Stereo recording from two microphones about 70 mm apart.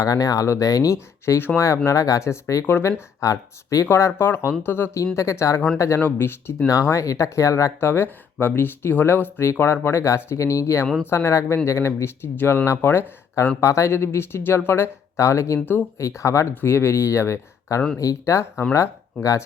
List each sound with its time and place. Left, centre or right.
0.0 s speech: left
0.9 s speech: left
3.8 s speech: left
5.1 s speech: left
6.1 s speech: left
6.8 s speech: left
13.6 s speech: left